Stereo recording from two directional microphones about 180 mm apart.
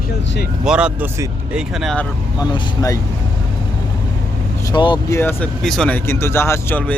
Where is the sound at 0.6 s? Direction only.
5° right (ahead or behind).